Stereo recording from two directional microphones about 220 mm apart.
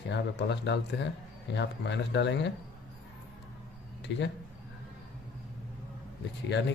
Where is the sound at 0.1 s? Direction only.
50° left (ahead or behind).